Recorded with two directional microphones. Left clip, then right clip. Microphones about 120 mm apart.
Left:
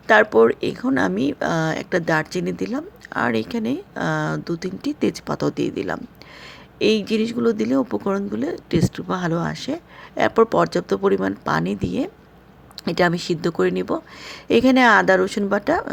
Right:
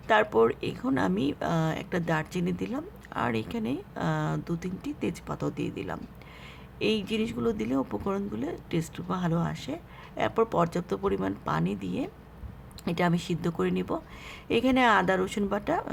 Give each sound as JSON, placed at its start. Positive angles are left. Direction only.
{"t": 0.1, "sound": "speech", "side_deg": 35}
{"t": 4.8, "sound": "speech", "side_deg": 45}